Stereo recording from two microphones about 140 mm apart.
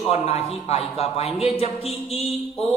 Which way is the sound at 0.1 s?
45° left (ahead or behind).